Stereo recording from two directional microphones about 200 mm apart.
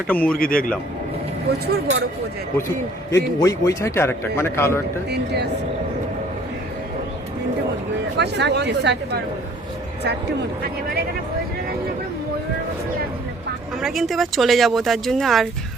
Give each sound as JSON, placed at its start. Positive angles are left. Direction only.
{"t": 0.1, "sound": "a man's voice", "side_deg": 5}
{"t": 0.3, "sound": "a man's voice", "side_deg": 45}
{"t": 1.5, "sound": "speech", "side_deg": -55}
{"t": 3.4, "sound": "a man's voice", "side_deg": 15}
{"t": 5.1, "sound": "speech", "side_deg": -55}
{"t": 8.2, "sound": "speech", "side_deg": -60}
{"t": 13.8, "sound": "speech", "side_deg": 0}